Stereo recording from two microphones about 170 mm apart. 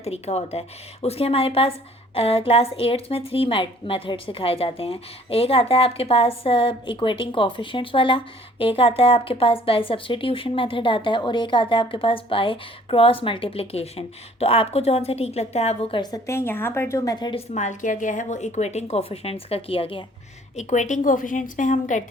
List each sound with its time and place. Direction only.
0.0 s a woman's voice: 40° left (ahead or behind)
17.5 s a woman's voice: 45° left (ahead or behind)
20.6 s a woman's voice: 45° left (ahead or behind)